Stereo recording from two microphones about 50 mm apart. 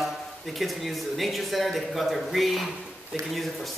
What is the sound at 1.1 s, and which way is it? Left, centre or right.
A man's voice, centre.